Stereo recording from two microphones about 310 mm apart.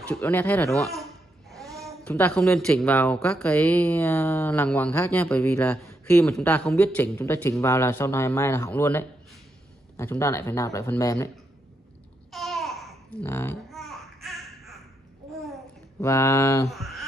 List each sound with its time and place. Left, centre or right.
0.1 s speech: centre
0.9 s babbling: centre
1.9 s speech: centre
12.3 s babbling: centre